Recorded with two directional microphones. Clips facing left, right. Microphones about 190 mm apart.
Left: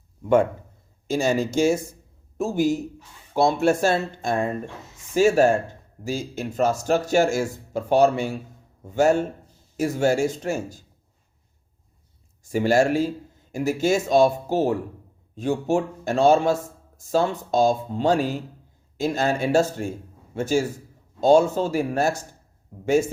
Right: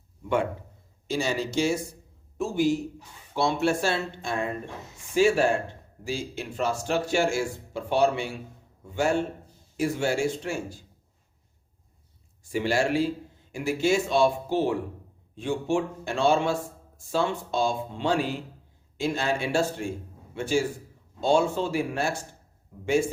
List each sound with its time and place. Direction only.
1.0 s speech: 45° left (ahead or behind)
12.4 s a man's voice: 45° left (ahead or behind)